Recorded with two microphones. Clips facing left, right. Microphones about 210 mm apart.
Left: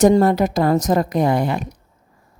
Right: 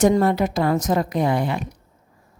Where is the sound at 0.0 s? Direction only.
40° left (ahead or behind).